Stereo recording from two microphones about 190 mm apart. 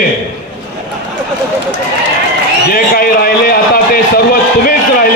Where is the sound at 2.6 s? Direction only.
50° left (ahead or behind).